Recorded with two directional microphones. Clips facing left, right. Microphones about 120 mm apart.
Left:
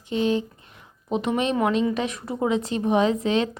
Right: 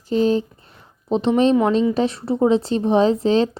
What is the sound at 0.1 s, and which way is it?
Speech, 35° right (ahead or behind).